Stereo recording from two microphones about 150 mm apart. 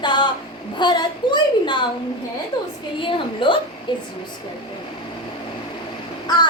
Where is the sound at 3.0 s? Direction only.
35° left (ahead or behind).